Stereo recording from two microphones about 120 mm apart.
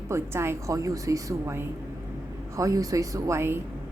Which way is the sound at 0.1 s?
20° right (ahead or behind).